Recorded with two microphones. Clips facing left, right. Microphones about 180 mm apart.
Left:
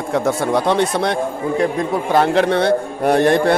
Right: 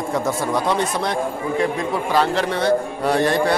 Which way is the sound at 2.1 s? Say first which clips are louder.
Left 6 dB; 55° left (ahead or behind).